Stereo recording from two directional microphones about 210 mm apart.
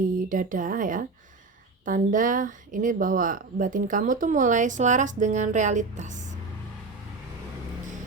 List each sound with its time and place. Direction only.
0.0 s speech: 40° right (ahead or behind)